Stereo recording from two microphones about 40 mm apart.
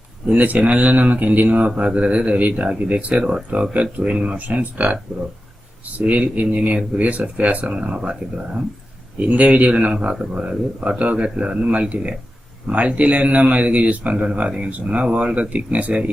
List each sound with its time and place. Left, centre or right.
0.3 s speech: right
1.6 s speech: right
3.8 s speech: right
6.0 s speech: right
9.1 s speech: right